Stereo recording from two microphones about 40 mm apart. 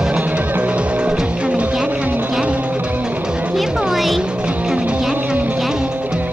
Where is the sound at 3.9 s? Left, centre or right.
Centre.